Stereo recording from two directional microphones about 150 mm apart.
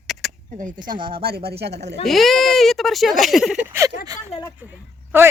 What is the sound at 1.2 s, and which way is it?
Speech, 90° right.